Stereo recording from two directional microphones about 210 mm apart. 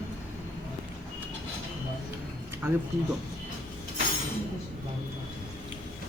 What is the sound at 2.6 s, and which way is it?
Speech, 10° right (ahead or behind).